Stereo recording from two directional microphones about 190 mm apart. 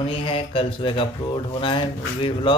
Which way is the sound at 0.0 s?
30° left (ahead or behind).